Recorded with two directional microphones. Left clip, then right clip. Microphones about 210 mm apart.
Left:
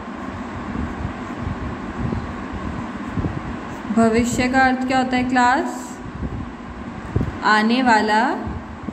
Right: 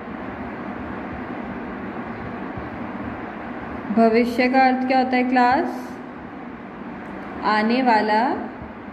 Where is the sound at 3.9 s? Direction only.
15° left (ahead or behind).